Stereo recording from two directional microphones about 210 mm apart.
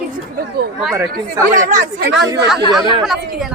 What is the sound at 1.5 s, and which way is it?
Speech, 40° right (ahead or behind).